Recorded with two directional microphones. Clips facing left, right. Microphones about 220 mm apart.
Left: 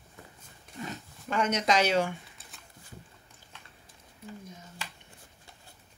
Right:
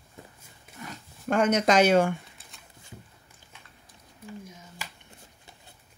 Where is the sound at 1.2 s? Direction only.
50° right (ahead or behind).